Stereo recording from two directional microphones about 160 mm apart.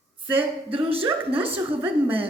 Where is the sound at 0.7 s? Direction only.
35° right (ahead or behind).